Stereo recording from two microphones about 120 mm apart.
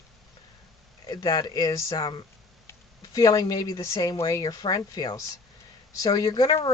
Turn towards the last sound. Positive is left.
turn(degrees=35)  # may be behind; listen again after turning